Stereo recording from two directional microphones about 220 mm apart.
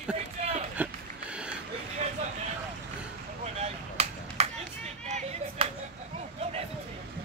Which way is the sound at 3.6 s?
30° right (ahead or behind).